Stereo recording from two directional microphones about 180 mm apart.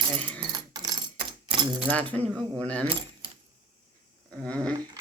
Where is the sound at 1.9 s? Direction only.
10° left (ahead or behind).